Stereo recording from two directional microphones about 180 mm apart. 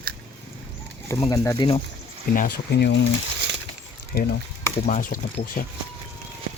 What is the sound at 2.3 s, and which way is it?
Speech, 55° left (ahead or behind).